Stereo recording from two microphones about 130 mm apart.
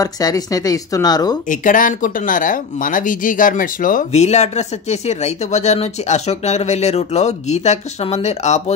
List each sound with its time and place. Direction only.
0.0 s speech: 30° left (ahead or behind)
1.5 s speech: 90° left; by 8.7 s 60° left (ahead or behind)